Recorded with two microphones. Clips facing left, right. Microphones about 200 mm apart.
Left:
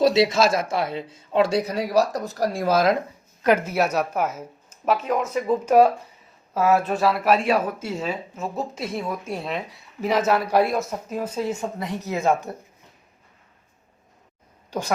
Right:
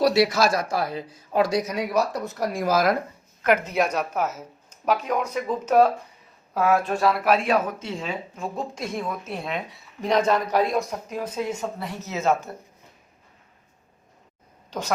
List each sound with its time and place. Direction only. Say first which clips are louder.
0.0 s speech: left 2 dB; 25° left (ahead or behind)
3.4 s speech: left 2 dB; 5° left (ahead or behind)
11.8 s speech: left 3 dB; 15° left (ahead or behind)
14.7 s speech: left 2 dB; 10° left (ahead or behind)